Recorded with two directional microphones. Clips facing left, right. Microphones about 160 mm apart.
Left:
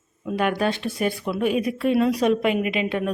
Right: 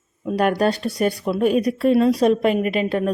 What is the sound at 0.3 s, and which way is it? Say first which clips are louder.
A woman's voice: right 4 dB; 40° right (ahead or behind).